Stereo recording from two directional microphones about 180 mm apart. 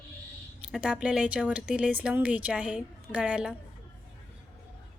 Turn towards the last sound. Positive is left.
turn(degrees=-5)  # may be behind; listen again after turning